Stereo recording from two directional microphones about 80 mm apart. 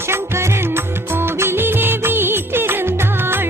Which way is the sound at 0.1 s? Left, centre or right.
Right.